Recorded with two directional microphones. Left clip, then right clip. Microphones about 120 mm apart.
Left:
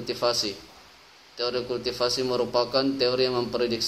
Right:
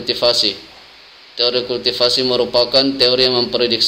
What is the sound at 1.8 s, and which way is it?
A man's voice, 40° right (ahead or behind).